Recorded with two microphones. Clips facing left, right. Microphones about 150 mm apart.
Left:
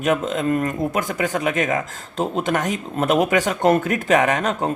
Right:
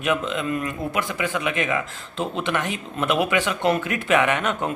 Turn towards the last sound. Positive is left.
turn(degrees=35)  # may be behind; listen again after turning